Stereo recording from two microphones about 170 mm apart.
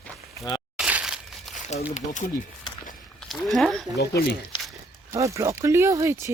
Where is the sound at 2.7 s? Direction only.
25° left (ahead or behind).